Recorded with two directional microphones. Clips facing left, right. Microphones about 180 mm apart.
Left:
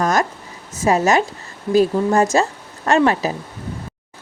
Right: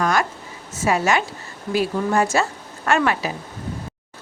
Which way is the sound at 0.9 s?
40° left (ahead or behind).